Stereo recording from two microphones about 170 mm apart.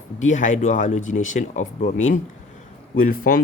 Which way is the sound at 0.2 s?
45° left (ahead or behind).